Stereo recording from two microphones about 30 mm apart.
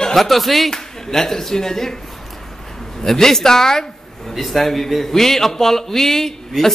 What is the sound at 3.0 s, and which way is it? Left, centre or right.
A man's voice, centre.